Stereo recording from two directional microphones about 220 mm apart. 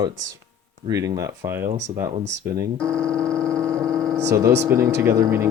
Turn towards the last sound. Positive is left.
turn(degrees=-10)  # may be behind; listen again after turning